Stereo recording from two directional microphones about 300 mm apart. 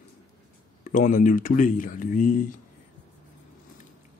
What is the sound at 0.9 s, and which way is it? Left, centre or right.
Speech, left.